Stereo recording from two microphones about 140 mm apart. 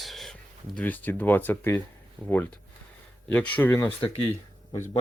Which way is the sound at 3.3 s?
10° left (ahead or behind).